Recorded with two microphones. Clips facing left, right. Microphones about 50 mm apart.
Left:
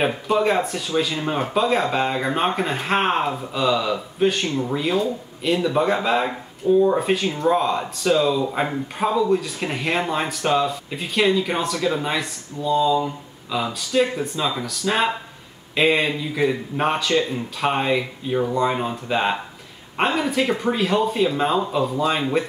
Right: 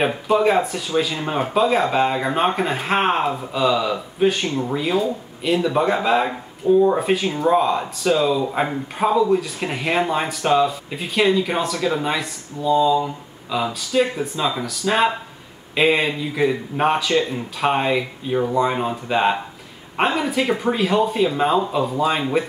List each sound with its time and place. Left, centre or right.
0.0 s speech: centre